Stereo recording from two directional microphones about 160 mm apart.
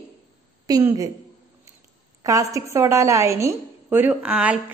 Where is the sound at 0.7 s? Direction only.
20° right (ahead or behind).